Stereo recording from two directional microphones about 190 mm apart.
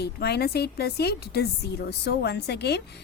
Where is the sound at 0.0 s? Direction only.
60° left (ahead or behind).